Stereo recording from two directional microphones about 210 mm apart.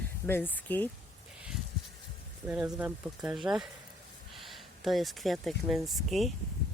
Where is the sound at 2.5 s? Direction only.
5° right (ahead or behind).